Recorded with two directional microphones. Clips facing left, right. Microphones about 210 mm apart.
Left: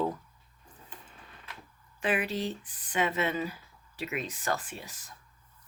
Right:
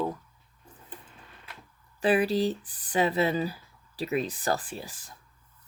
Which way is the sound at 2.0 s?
35° right (ahead or behind).